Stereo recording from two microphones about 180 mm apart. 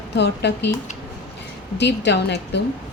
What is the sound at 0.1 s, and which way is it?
Speech, 70° left (ahead or behind).